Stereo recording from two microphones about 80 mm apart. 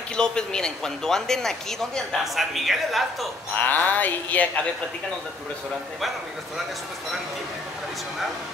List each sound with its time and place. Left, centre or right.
0.1 s speech: centre
3.5 s speech: left